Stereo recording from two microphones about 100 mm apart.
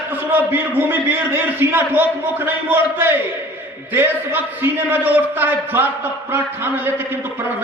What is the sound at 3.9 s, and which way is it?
A man's voice, 20° right (ahead or behind).